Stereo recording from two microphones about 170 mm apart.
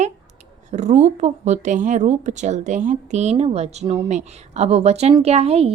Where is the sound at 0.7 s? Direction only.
40° right (ahead or behind).